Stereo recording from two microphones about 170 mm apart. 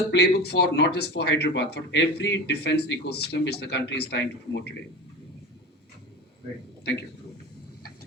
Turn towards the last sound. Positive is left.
turn(degrees=85)